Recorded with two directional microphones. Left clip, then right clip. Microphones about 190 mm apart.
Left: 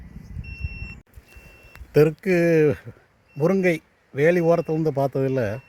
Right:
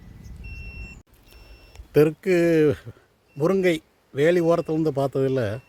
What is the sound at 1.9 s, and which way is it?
A man's voice, 10° left (ahead or behind).